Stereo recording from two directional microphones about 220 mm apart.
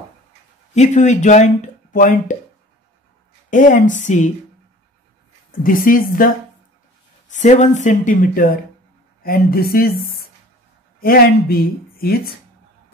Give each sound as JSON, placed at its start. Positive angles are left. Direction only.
{"t": 0.7, "sound": "speech", "side_deg": 35}
{"t": 3.4, "sound": "speech", "side_deg": 35}
{"t": 5.5, "sound": "a woman's voice", "side_deg": 40}